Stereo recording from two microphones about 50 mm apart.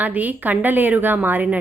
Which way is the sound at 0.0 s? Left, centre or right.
Right.